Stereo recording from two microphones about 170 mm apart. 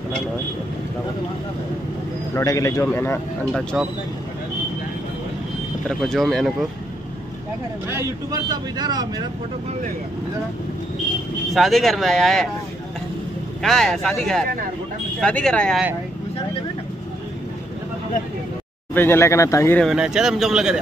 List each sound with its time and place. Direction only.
2.3 s a man's voice: 20° left (ahead or behind)
3.8 s speech: 5° right (ahead or behind)
5.9 s speech: centre (ahead or behind)
7.9 s speech: 20° right (ahead or behind)
11.5 s speech: centre (ahead or behind)
13.6 s speech: centre (ahead or behind)
18.9 s a man's voice: 15° left (ahead or behind)
19.8 s speech: centre (ahead or behind)